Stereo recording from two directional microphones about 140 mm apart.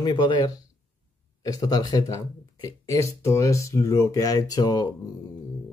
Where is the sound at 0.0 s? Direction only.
30° left (ahead or behind).